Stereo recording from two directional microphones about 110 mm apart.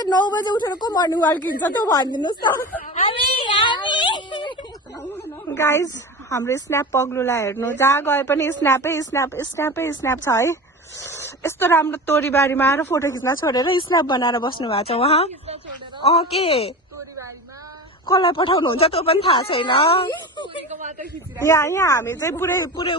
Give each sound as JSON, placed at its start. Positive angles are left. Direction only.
{"t": 0.0, "sound": "a woman's voice", "side_deg": 40}
{"t": 3.1, "sound": "a sound", "side_deg": 45}
{"t": 5.1, "sound": "a sound", "side_deg": 25}
{"t": 6.3, "sound": "a woman's voice", "side_deg": 25}
{"t": 14.6, "sound": "speech", "side_deg": 60}
{"t": 18.0, "sound": "speech", "side_deg": 50}
{"t": 20.7, "sound": "a man's voice", "side_deg": -90}
{"t": 21.4, "sound": "a woman's voice", "side_deg": 25}